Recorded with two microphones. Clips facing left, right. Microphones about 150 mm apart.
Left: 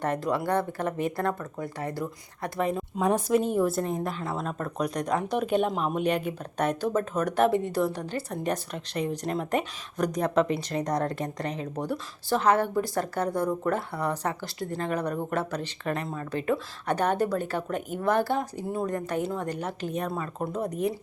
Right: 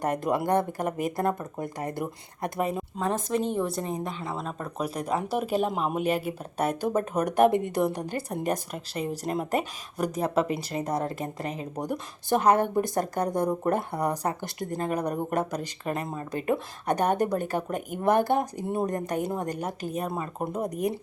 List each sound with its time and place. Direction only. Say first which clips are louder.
0.0 s speech: right 1 dB; 15° right (ahead or behind)
2.6 s speech: left 1 dB; 5° right (ahead or behind)
3.0 s a woman's voice: left 4 dB; 5° left (ahead or behind)
11.6 s speech: even; 15° right (ahead or behind)